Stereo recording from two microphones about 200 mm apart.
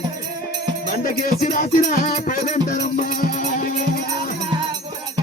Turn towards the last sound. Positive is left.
turn(degrees=45)  # may be behind; listen again after turning